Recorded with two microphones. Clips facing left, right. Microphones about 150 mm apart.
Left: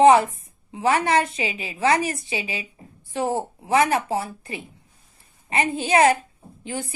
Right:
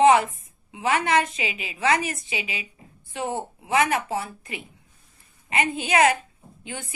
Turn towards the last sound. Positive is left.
turn(degrees=35)  # may be behind; listen again after turning